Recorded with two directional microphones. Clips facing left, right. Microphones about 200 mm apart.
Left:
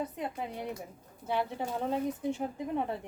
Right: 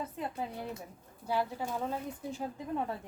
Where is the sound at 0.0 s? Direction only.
20° left (ahead or behind).